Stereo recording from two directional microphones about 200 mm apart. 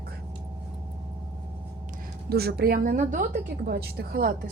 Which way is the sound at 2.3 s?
55° right (ahead or behind).